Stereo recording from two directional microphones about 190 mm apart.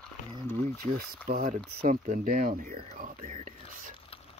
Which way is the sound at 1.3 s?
45° right (ahead or behind).